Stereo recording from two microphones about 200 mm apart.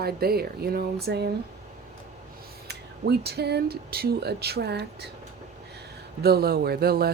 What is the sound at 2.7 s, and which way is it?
Speech, 55° right (ahead or behind).